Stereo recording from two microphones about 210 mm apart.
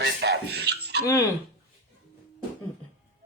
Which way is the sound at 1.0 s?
15° left (ahead or behind).